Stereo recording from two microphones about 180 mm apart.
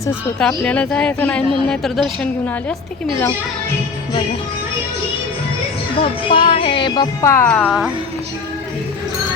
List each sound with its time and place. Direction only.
0.0 s a woman's voice: 5° left (ahead or behind)
6.0 s music: 30° left (ahead or behind); by 7.7 s 10° left (ahead or behind)